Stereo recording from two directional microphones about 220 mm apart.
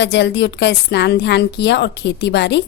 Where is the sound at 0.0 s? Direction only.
50° left (ahead or behind).